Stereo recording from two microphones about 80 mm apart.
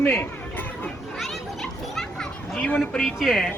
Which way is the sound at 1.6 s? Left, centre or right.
Centre.